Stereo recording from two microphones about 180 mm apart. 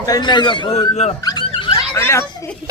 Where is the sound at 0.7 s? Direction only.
40° left (ahead or behind).